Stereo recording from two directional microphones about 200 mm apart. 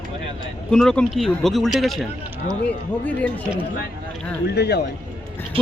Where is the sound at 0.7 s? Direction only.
5° left (ahead or behind).